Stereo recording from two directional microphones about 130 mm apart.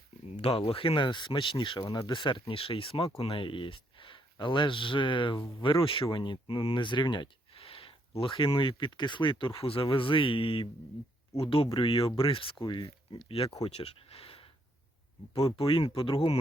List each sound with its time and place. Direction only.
0.3 s speech: 50° left (ahead or behind)
15.5 s speech: 40° left (ahead or behind)